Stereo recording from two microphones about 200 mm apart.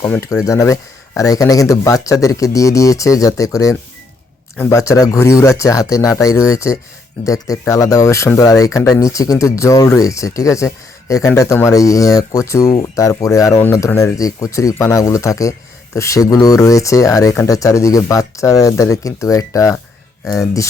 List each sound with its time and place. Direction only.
0.0 s speech: 15° left (ahead or behind)